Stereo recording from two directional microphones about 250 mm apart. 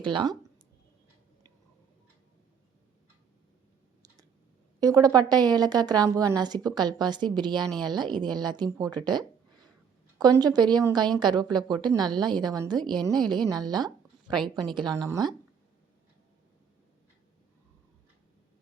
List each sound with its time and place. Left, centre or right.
0.0 s speech: centre
4.8 s a woman's voice: centre
9.0 s a sound: centre
10.2 s a woman's voice: centre